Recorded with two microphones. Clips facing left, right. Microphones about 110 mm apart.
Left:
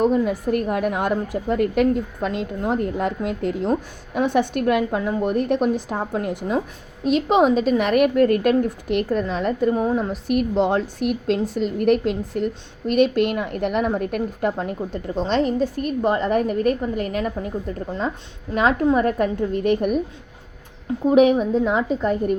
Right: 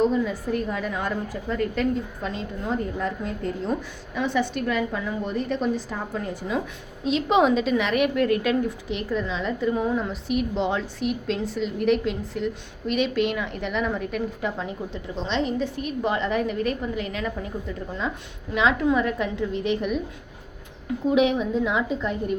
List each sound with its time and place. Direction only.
0.0 s a woman's voice: 55° left (ahead or behind); by 3.7 s 75° left (ahead or behind)
3.7 s a woman's voice: 50° left (ahead or behind)
7.0 s a woman's voice: 45° left (ahead or behind)
9.8 s a woman's voice: 25° left (ahead or behind)
10.1 s a woman's voice: 50° left (ahead or behind)
21.1 s a woman's voice: 45° left (ahead or behind)